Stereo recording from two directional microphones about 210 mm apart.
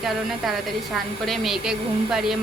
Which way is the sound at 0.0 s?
Centre (ahead or behind).